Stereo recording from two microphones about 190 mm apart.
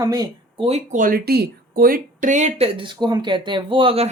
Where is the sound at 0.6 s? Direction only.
35° right (ahead or behind).